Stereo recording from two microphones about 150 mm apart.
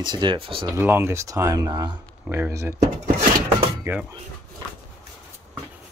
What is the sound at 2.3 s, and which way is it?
Speech, 15° right (ahead or behind).